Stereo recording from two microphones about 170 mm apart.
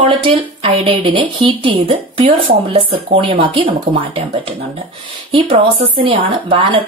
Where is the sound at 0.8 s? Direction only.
30° right (ahead or behind).